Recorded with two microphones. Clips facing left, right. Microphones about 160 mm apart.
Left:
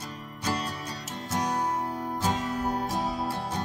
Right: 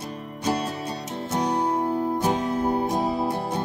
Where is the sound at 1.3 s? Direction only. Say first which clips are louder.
Right 5 dB; 25° right (ahead or behind).